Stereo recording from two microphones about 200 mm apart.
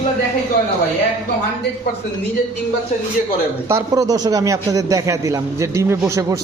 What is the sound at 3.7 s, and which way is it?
A man's voice, 15° right (ahead or behind).